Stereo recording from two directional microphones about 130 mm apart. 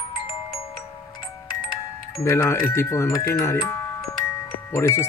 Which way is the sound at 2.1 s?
25° left (ahead or behind).